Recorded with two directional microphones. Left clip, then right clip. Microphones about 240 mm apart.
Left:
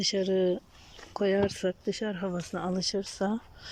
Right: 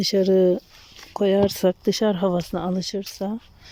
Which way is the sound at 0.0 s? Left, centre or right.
Centre.